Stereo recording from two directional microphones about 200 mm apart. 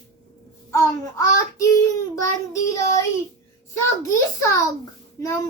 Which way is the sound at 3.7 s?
15° left (ahead or behind).